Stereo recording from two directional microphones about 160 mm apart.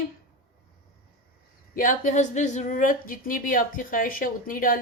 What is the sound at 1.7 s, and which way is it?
Speech, 55° left (ahead or behind).